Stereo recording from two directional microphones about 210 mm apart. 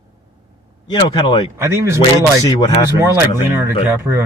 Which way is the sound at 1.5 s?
15° right (ahead or behind).